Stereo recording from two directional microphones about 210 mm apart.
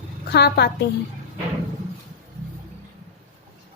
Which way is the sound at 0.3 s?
50° left (ahead or behind).